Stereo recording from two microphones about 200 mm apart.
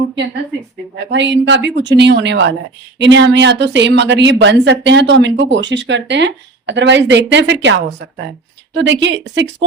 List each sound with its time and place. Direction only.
0.9 s a woman's voice: 65° right (ahead or behind)